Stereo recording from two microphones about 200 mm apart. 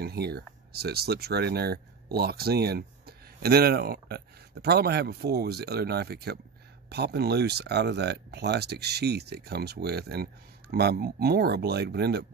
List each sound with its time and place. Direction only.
0.0 s speech: 55° right (ahead or behind)